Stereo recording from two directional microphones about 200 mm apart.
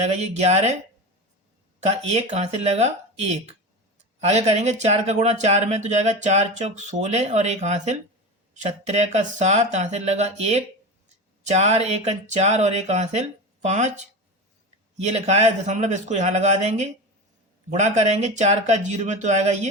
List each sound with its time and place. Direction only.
0.0 s speech: 35° right (ahead or behind)
1.8 s speech: 30° right (ahead or behind)